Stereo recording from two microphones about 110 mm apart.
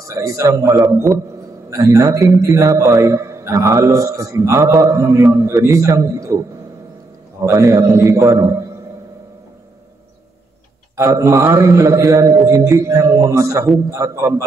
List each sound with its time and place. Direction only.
0.0 s a man's voice: 30° right (ahead or behind)
7.4 s a man's voice: 30° right (ahead or behind)
11.0 s a man's voice: 30° right (ahead or behind)